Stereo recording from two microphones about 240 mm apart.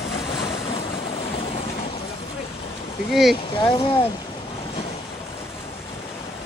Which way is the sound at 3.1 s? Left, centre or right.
Centre.